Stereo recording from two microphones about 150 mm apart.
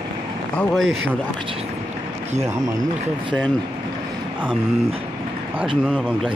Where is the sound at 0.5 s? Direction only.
Centre (ahead or behind).